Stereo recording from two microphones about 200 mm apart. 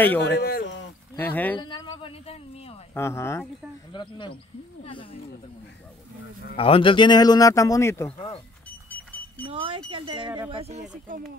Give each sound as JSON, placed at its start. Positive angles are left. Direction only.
{"t": 0.2, "sound": "speech", "side_deg": 55}
{"t": 1.1, "sound": "speech", "side_deg": 10}
{"t": 1.6, "sound": "a sound", "side_deg": 25}
{"t": 2.9, "sound": "speech", "side_deg": 15}
{"t": 3.9, "sound": "speech", "side_deg": 25}
{"t": 6.5, "sound": "speech", "side_deg": 25}
{"t": 8.9, "sound": "a sound", "side_deg": 10}
{"t": 9.5, "sound": "speech", "side_deg": -25}